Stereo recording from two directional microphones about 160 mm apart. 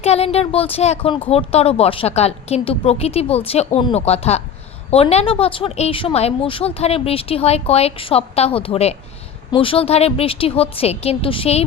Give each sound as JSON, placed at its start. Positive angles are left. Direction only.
{"t": 0.0, "sound": "a woman's voice", "side_deg": 40}